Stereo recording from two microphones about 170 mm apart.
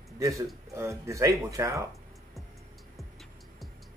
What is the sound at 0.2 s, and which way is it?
A man's voice, 20° right (ahead or behind).